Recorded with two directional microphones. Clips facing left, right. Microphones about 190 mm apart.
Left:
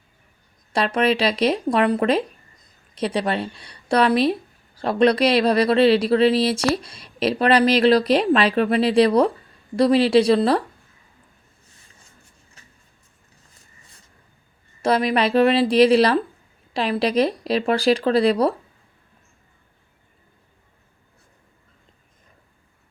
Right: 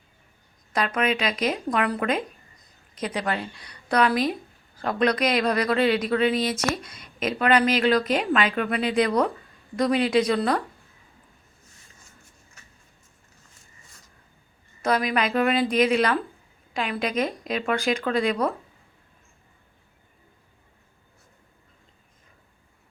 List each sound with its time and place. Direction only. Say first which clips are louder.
0.7 s a woman's voice: left 5 dB; 30° left (ahead or behind)
12.6 s a sound: left 3 dB; 35° left (ahead or behind)
14.8 s a woman's voice: left 4 dB; 30° left (ahead or behind)